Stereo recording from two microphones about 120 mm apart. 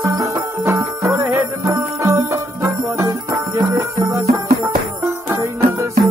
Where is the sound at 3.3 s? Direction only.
15° right (ahead or behind).